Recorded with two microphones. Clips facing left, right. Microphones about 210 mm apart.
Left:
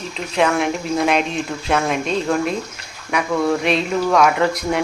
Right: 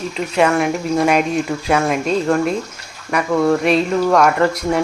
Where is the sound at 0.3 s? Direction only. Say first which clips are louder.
Right 2 dB; centre (ahead or behind).